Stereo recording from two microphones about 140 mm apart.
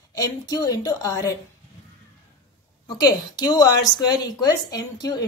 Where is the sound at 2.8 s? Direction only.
25° left (ahead or behind).